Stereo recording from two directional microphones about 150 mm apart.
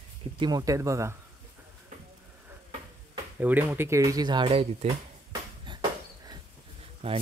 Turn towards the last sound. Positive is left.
turn(degrees=-40)  # may be behind; listen again after turning